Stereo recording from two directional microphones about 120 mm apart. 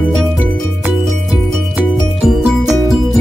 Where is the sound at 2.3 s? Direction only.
Centre (ahead or behind).